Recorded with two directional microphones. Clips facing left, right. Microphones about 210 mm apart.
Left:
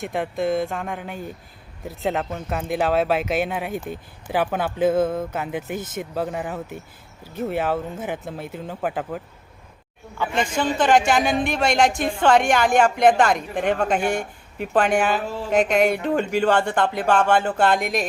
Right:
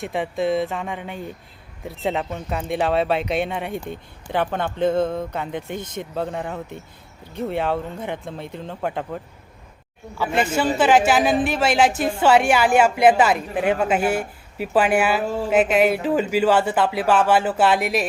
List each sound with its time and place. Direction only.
0.0 s a woman's voice: centre (ahead or behind)
10.2 s a woman's voice: 10° right (ahead or behind)